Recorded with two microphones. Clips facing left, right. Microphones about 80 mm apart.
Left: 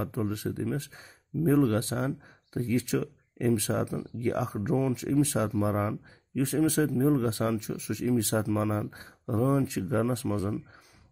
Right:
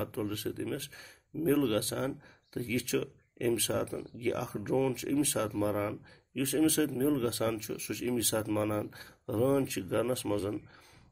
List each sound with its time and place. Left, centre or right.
0.0 s speech: left
4.2 s speech: left